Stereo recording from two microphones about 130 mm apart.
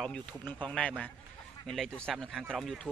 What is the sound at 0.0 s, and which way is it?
Speech, 10° left (ahead or behind).